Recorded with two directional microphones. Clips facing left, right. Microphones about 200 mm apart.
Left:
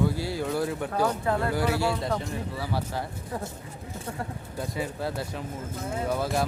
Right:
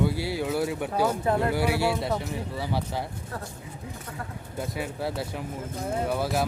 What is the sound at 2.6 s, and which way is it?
Speech, 15° right (ahead or behind).